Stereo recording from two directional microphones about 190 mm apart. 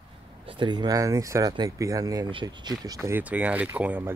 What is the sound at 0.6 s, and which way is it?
Speech, 25° right (ahead or behind).